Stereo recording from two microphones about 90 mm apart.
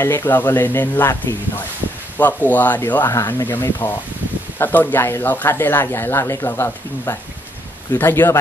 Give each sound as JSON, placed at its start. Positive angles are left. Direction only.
{"t": 0.0, "sound": "speech", "side_deg": 25}